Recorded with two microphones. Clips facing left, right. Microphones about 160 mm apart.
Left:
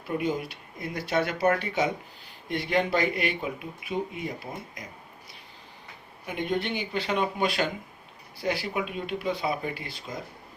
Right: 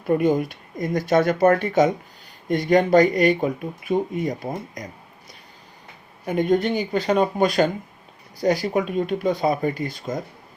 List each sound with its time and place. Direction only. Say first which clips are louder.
0.0 s speech: right 9 dB; 50° right (ahead or behind)
6.2 s speech: right 9 dB; 45° right (ahead or behind)